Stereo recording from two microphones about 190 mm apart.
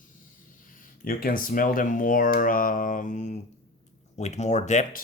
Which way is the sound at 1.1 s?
50° left (ahead or behind).